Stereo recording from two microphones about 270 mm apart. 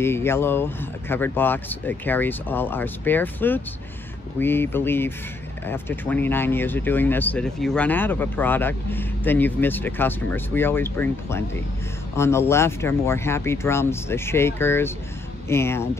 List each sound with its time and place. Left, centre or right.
0.0 s speech: centre